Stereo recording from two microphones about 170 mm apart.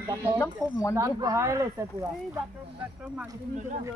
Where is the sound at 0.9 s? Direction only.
20° right (ahead or behind).